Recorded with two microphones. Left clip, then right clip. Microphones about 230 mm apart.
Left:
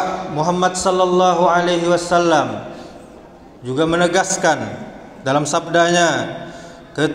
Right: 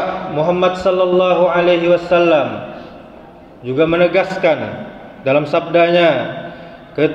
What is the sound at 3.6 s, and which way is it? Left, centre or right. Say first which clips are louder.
Speech: right 3 dB; left.